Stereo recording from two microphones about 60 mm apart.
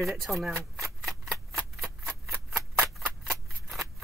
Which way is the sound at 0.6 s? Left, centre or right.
Right.